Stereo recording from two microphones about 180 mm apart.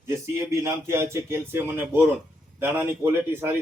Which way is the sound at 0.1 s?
15° right (ahead or behind).